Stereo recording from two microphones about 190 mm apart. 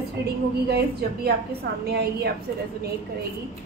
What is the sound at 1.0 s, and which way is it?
Speech, 55° right (ahead or behind).